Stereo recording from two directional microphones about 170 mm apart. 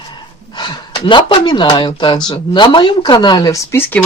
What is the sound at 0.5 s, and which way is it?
Speech, 25° left (ahead or behind).